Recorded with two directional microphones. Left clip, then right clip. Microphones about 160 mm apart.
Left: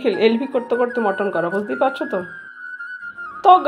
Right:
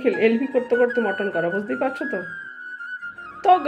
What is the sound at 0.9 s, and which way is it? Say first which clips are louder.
Speech: left 3 dB; 45° left (ahead or behind).